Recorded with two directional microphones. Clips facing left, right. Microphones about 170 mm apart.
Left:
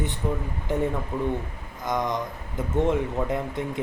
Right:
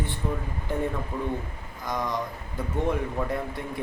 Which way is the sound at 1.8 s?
20° left (ahead or behind).